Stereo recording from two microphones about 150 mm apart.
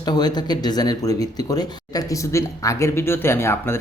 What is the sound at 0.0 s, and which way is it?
Speech, 30° left (ahead or behind).